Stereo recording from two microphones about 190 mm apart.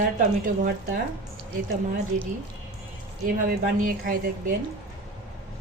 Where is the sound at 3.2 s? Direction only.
45° right (ahead or behind).